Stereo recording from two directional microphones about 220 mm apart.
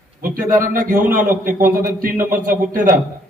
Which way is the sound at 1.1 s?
35° right (ahead or behind).